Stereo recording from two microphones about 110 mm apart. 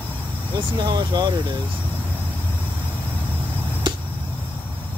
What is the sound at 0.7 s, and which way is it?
Speech, 40° right (ahead or behind).